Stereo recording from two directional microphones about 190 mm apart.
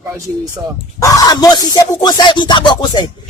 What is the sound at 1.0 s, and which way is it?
Music, 20° left (ahead or behind).